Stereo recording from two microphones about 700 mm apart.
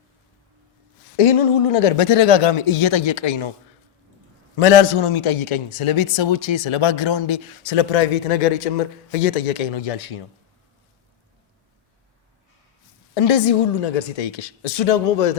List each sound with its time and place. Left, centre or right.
1.1 s a man's voice: left
4.5 s a man's voice: left
9.7 s a man's voice: left
13.1 s a woman's voice: left